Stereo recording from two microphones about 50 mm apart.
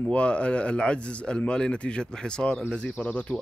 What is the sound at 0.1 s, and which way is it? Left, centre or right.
Speech, left.